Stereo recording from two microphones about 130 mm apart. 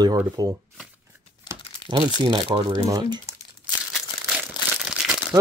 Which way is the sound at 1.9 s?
35° right (ahead or behind).